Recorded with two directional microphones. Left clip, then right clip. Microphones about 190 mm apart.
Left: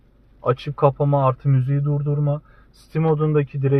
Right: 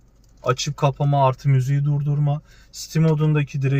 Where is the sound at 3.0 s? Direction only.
35° left (ahead or behind).